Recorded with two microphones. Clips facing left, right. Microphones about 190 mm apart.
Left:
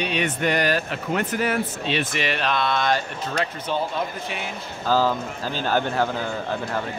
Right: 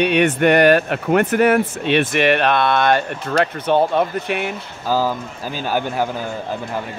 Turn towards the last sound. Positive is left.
turn(degrees=-10)  # may be behind; listen again after turning